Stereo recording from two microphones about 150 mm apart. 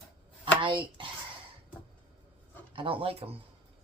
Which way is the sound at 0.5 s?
35° right (ahead or behind).